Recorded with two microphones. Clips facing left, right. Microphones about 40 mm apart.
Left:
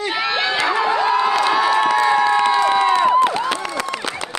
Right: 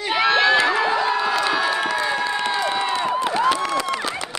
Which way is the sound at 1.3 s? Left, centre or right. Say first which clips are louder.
Left 4 dB; left.